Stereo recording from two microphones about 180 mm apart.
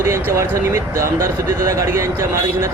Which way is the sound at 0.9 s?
50° right (ahead or behind).